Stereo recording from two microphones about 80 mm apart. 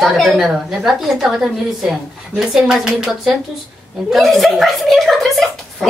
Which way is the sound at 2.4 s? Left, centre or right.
Centre.